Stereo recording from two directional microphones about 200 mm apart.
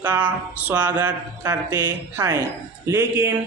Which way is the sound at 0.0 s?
10° right (ahead or behind).